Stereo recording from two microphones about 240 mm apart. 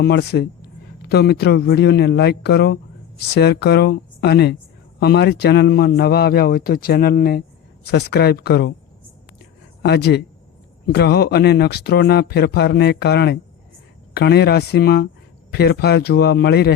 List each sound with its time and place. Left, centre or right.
0.0 s a man's voice: left
9.8 s speech: left